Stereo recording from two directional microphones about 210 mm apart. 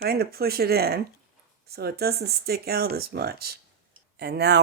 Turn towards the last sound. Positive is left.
turn(degrees=-50)  # may be behind; listen again after turning